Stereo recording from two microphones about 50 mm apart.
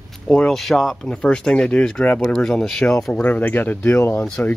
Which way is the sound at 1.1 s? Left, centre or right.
Centre.